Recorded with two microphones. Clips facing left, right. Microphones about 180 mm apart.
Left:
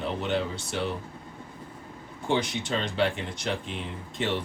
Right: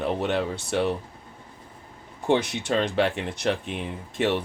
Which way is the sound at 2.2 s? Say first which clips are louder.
Right 4 dB; 65° right (ahead or behind).